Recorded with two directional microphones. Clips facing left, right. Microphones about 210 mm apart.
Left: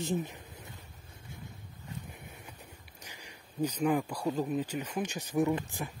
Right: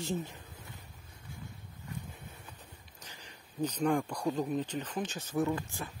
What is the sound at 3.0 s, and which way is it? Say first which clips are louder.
A man's voice: left 2 dB; 10° left (ahead or behind).